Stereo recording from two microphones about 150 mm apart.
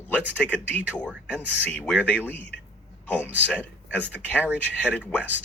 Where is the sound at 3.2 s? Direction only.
10° right (ahead or behind).